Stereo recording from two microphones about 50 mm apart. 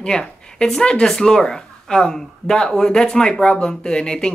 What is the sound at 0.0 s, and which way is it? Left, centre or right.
Speech, centre.